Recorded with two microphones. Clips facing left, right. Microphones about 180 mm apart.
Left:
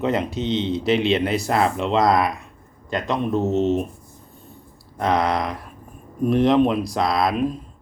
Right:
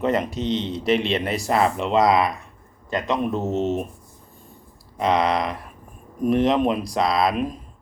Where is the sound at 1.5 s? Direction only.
Centre (ahead or behind).